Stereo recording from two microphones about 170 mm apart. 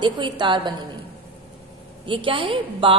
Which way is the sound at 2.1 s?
30° right (ahead or behind).